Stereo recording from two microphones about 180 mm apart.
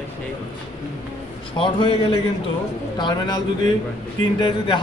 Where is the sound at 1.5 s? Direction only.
30° left (ahead or behind).